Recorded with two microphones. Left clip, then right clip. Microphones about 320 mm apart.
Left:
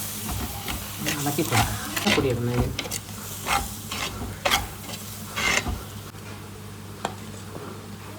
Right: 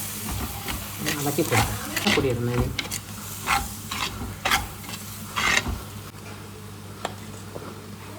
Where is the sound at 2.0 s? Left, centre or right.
Right.